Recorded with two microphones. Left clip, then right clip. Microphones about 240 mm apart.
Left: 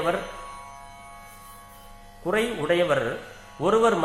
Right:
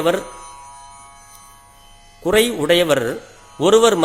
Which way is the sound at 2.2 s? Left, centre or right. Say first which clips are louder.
Right 9 dB; right.